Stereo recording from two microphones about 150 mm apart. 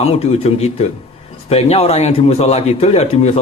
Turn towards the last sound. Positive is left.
turn(degrees=45)  # may be behind; listen again after turning